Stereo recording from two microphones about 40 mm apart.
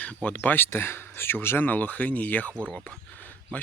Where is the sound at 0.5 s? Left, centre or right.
Left.